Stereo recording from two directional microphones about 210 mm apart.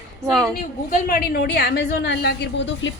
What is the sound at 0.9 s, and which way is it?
A woman's voice, 45° left (ahead or behind).